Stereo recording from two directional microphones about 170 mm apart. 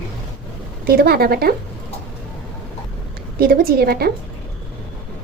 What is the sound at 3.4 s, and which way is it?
Speech, 60° right (ahead or behind).